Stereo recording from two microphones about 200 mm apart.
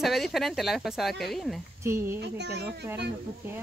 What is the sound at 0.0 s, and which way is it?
Speech, centre (ahead or behind).